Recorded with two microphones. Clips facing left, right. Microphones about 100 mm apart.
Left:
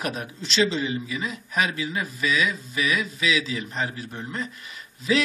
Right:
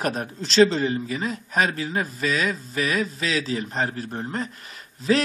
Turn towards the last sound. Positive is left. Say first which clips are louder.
# right 2 dB
turn(degrees=-45)  # may be behind; listen again after turning